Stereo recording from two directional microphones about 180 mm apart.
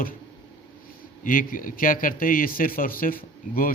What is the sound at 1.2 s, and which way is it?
Speech, 50° left (ahead or behind).